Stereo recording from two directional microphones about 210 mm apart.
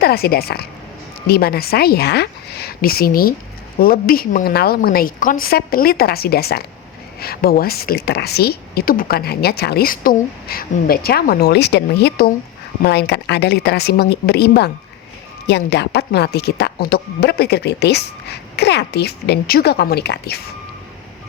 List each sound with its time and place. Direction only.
0.0 s a woman's voice: 45° left (ahead or behind)